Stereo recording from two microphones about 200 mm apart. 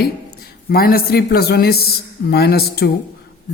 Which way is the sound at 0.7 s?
50° left (ahead or behind).